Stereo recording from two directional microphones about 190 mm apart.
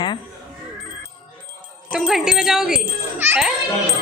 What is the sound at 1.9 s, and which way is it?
A child's voice, centre (ahead or behind).